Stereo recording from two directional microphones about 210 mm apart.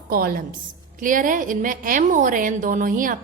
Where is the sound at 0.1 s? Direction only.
45° right (ahead or behind).